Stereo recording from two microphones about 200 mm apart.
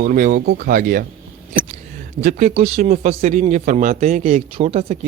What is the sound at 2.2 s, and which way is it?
A man's voice, 40° right (ahead or behind).